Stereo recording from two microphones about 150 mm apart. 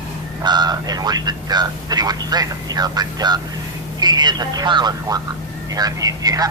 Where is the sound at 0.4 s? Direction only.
30° right (ahead or behind).